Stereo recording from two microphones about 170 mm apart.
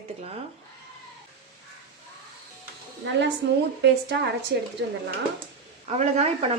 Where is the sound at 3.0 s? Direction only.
90° right.